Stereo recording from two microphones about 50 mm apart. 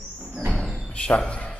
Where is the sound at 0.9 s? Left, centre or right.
Left.